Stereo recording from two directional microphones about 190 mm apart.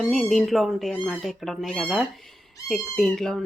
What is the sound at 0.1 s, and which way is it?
Speech, centre (ahead or behind).